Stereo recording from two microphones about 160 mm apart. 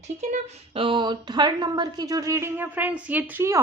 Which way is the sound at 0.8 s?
30° right (ahead or behind).